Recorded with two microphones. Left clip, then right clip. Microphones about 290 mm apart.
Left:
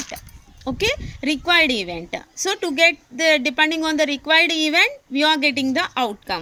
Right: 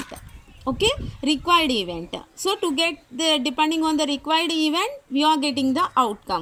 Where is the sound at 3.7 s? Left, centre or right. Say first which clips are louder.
Left 2 dB; centre.